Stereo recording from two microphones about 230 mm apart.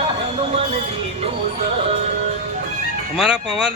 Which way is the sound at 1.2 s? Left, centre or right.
Right.